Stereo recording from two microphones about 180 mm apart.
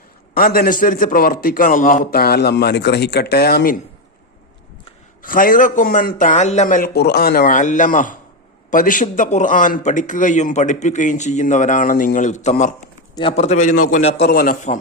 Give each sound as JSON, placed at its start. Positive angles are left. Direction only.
{"t": 0.3, "sound": "a man's voice", "side_deg": 55}
{"t": 5.2, "sound": "a man's voice", "side_deg": 50}
{"t": 14.3, "sound": "a man's voice", "side_deg": 55}